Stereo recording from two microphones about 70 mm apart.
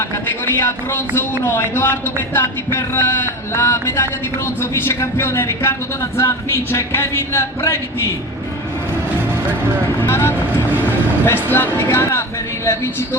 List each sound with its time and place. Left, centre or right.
0.5 s speech: left
9.8 s speech: left